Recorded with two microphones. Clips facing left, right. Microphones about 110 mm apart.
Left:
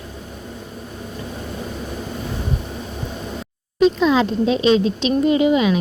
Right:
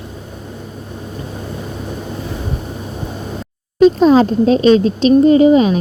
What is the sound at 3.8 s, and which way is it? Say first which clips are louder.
Speech: right 6 dB; 45° right (ahead or behind).